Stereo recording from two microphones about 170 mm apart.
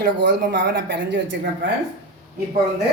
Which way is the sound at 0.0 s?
90° right.